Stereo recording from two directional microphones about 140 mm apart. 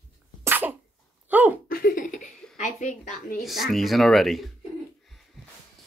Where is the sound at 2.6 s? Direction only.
60° left (ahead or behind); by 3.4 s 80° left.